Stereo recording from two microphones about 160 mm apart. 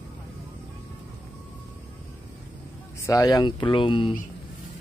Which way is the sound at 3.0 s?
20° left (ahead or behind).